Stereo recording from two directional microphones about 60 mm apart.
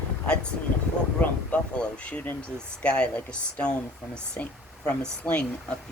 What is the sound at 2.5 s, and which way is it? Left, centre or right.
Speech, centre.